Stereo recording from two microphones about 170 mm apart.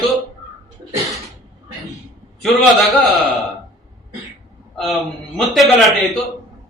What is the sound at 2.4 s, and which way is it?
Speech, centre (ahead or behind).